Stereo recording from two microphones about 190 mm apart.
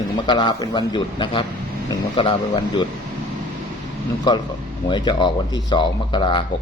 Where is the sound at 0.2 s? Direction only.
25° left (ahead or behind).